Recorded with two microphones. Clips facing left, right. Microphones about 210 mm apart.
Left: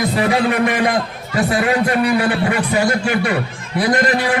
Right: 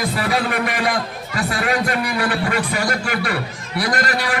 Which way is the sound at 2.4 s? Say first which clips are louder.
Left 4 dB; 25° left (ahead or behind).